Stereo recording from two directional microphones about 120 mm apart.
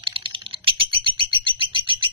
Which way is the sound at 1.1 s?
45° right (ahead or behind).